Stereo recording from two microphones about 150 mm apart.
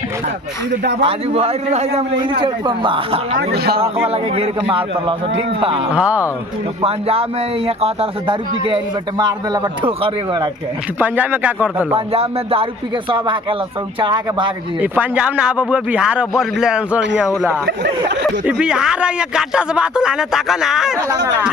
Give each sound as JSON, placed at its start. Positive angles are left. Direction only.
{"t": 1.0, "sound": "a man's voice", "side_deg": -40}
{"t": 2.4, "sound": "a man's voice", "side_deg": -30}
{"t": 3.5, "sound": "a man's voice", "side_deg": -90}
{"t": 3.8, "sound": "a man's voice", "side_deg": -40}
{"t": 5.9, "sound": "a man's voice", "side_deg": -10}
{"t": 6.8, "sound": "a man's voice", "side_deg": -40}
{"t": 11.0, "sound": "a man's voice", "side_deg": -10}
{"t": 11.9, "sound": "a man's voice", "side_deg": -40}
{"t": 14.8, "sound": "a man's voice", "side_deg": -10}